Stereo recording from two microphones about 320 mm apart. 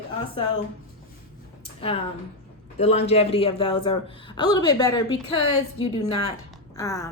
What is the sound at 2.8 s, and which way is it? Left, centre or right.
Speech, centre.